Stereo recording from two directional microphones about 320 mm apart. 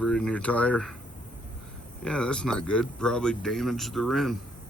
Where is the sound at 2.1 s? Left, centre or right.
Centre.